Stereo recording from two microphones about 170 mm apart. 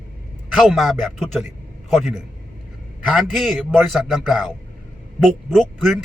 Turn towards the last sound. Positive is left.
turn(degrees=0)  # may be behind; listen again after turning